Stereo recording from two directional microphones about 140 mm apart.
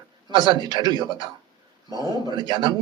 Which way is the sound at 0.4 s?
35° right (ahead or behind).